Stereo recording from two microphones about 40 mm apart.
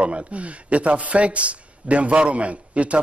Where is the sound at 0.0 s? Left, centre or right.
Right.